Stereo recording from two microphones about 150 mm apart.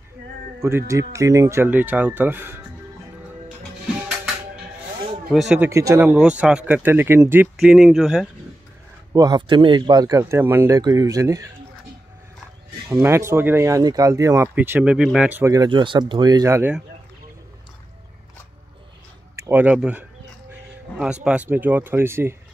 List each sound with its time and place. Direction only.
0.6 s speech: 15° right (ahead or behind)
5.3 s speech: centre (ahead or behind)
5.6 s speech: 20° right (ahead or behind); by 8.3 s centre (ahead or behind)
9.1 s speech: 30° right (ahead or behind)
12.8 s speech: 5° right (ahead or behind)
13.1 s speech: 15° right (ahead or behind)
15.5 s speech: 30° right (ahead or behind)
19.3 s speech: 15° right (ahead or behind)